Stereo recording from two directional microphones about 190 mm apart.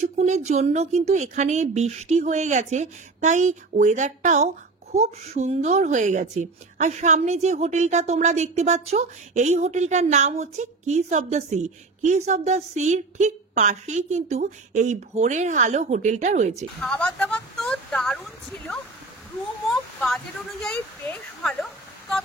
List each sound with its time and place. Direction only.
0.0 s speech: 40° right (ahead or behind)
16.8 s speech: 5° left (ahead or behind)
19.7 s a sound: centre (ahead or behind)